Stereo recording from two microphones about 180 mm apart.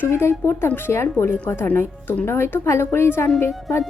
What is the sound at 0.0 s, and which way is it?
A woman's voice, 15° left (ahead or behind).